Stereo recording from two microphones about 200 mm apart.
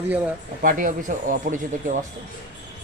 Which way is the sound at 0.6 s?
45° right (ahead or behind).